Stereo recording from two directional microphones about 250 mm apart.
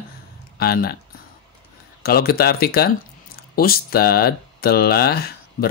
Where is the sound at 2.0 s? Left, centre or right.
Left.